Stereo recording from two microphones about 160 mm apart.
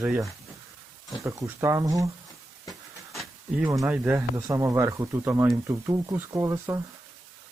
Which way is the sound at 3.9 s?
15° right (ahead or behind).